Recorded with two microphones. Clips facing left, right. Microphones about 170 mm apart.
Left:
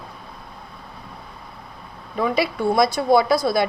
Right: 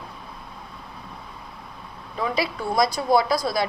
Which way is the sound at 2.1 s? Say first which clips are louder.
Left 4 dB; 60° left (ahead or behind).